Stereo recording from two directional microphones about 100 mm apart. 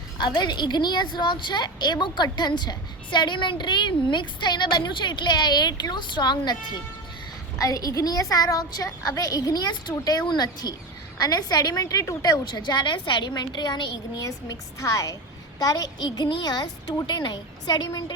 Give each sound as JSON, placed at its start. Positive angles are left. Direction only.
{"t": 0.2, "sound": "a woman's voice", "side_deg": 50}
{"t": 7.6, "sound": "a woman's voice", "side_deg": 35}
{"t": 14.3, "sound": "a woman's voice", "side_deg": 35}